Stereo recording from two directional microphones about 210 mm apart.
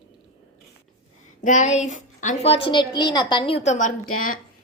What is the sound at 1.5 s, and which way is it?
A woman's voice, 35° left (ahead or behind).